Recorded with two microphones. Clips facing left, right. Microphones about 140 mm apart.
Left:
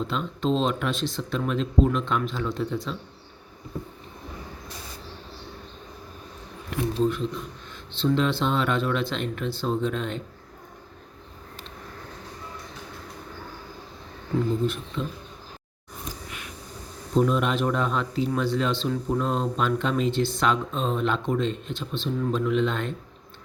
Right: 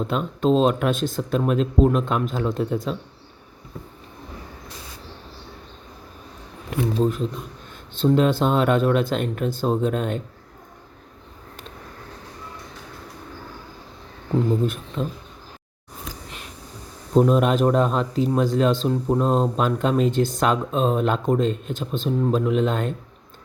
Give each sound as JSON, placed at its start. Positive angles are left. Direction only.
{"t": 0.0, "sound": "speech", "side_deg": -45}
{"t": 7.0, "sound": "speech", "side_deg": -40}
{"t": 15.0, "sound": "speech", "side_deg": -45}
{"t": 17.2, "sound": "speech", "side_deg": -40}